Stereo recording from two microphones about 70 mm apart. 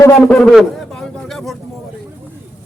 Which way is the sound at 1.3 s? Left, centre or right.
Centre.